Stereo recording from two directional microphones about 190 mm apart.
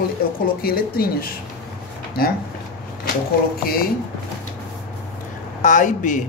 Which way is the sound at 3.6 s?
50° left (ahead or behind).